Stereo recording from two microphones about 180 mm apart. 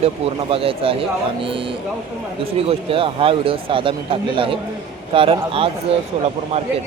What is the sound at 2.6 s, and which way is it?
A man's voice, 30° right (ahead or behind).